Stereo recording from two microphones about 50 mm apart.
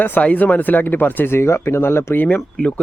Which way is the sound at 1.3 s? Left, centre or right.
Left.